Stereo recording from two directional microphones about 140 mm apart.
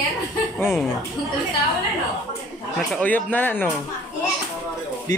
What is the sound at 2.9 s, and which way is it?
Speech, 10° left (ahead or behind).